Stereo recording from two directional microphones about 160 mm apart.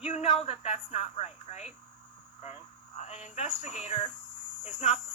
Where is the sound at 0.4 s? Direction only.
40° left (ahead or behind).